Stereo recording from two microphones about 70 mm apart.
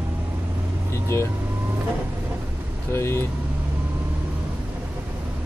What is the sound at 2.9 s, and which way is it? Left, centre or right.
Speech, left.